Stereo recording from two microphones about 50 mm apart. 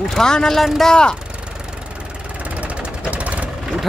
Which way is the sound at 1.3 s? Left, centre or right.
Right.